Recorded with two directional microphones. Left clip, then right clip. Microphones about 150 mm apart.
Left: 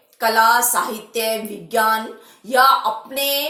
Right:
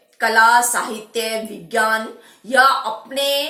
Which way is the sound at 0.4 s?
20° left (ahead or behind).